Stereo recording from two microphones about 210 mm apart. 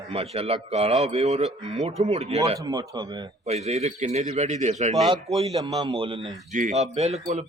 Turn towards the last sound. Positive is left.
turn(degrees=-30)  # may be behind; listen again after turning